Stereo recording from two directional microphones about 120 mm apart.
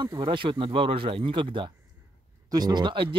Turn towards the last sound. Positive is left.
turn(degrees=-40)  # may be behind; listen again after turning